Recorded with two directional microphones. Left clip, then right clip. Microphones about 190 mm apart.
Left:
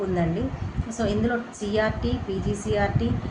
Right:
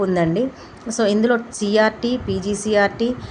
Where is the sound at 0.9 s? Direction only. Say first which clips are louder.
Right 8 dB; 55° right (ahead or behind).